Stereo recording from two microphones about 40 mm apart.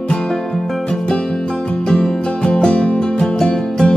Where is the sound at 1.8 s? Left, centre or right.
Centre.